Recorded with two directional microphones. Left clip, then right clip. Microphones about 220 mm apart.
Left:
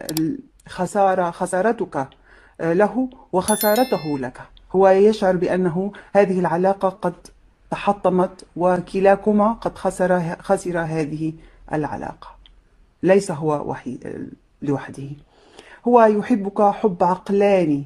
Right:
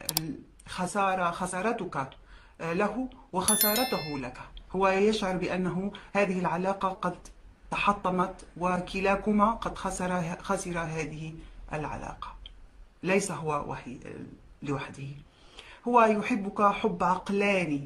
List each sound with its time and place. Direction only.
0.2 s speech: centre (ahead or behind)
0.7 s speech: 35° left (ahead or behind)
3.4 s speech: centre (ahead or behind)
4.1 s speech: 35° left (ahead or behind)